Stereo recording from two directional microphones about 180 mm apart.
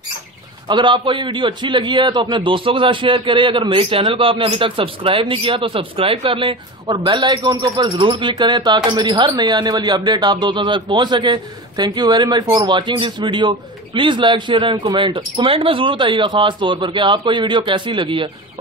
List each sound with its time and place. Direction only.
0.7 s a man's voice: 25° right (ahead or behind)